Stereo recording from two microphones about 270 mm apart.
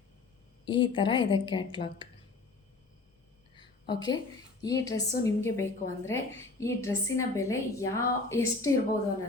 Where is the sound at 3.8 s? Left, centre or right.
Centre.